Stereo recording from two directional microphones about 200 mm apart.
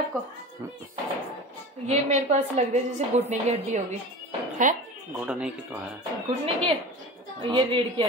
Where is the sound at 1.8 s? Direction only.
35° right (ahead or behind).